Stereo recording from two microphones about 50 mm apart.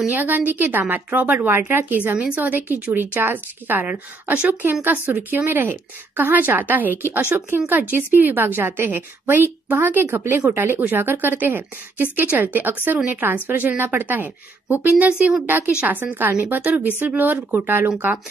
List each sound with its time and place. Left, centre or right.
0.1 s speech: right
2.0 s a woman's voice: right
2.4 s a woman's voice: right
4.3 s speech: right
10.0 s a woman's voice: right
15.0 s a woman's voice: right
15.4 s a woman's voice: right
17.8 s speech: right